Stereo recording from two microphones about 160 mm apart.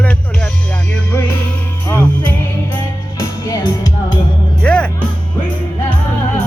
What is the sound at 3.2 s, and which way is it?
Music, 20° left (ahead or behind).